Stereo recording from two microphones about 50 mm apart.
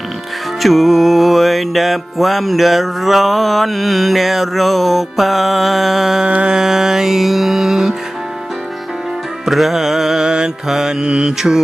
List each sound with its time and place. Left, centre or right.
0.6 s music: centre
6.2 s mantra: right
6.6 s mantra: centre
9.5 s mantra: centre